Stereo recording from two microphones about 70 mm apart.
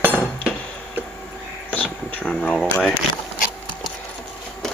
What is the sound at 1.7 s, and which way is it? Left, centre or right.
Speech, left.